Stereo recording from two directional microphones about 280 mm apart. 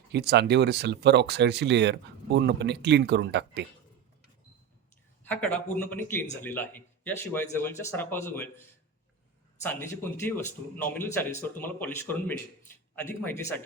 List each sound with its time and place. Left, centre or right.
0.1 s speech: right
5.2 s speech: centre
9.6 s speech: centre